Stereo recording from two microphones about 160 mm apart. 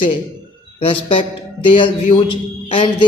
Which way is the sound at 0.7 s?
35° left (ahead or behind).